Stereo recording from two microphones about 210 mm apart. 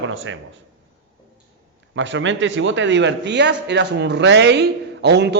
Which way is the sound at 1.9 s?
60° right (ahead or behind).